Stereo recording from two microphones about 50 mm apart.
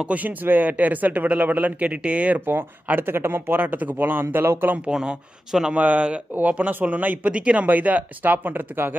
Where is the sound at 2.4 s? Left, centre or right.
Right.